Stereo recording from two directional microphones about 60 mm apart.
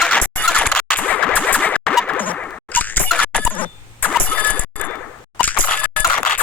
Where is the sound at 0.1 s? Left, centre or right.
Left.